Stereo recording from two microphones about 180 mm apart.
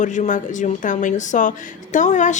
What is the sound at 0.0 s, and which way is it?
A woman's voice, 45° left (ahead or behind).